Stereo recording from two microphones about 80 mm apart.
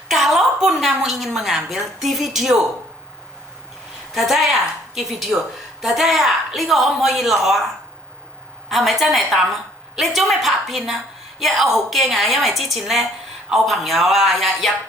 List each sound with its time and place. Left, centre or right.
0.1 s a woman's voice: centre
4.1 s a woman's voice: centre
8.7 s a woman's voice: centre
9.5 s a sound: centre
10.2 s a woman's voice: centre